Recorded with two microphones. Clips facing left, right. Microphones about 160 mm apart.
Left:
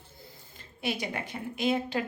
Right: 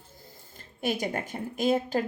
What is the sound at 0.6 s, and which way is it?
Speech, 45° right (ahead or behind).